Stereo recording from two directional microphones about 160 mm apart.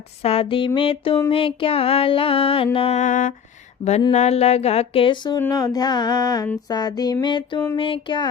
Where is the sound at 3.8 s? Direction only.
30° left (ahead or behind).